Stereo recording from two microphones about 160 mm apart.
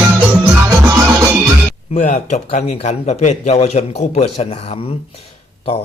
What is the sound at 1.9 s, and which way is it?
Speech, 45° left (ahead or behind).